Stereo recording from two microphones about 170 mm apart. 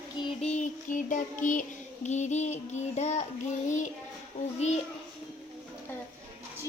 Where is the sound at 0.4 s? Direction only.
45° left (ahead or behind).